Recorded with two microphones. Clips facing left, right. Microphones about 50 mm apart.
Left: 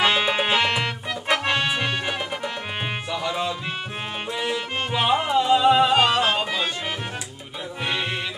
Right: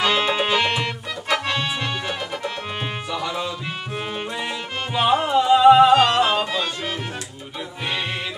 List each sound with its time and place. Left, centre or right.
0.0 s music: centre
5.4 s music: centre
5.9 s music: centre